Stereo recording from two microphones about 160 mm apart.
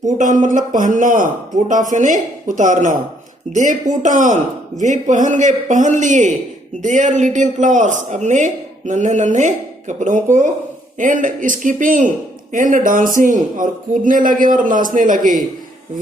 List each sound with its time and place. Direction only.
0.2 s a man's voice: 55° right (ahead or behind)